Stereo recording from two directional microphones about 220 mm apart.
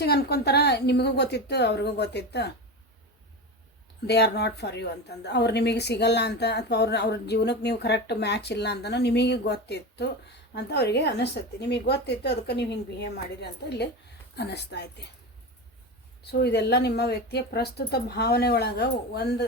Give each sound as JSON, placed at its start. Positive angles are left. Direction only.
{"t": 0.0, "sound": "a woman's voice", "side_deg": 45}
{"t": 4.0, "sound": "a woman's voice", "side_deg": 50}
{"t": 16.2, "sound": "a woman's voice", "side_deg": 50}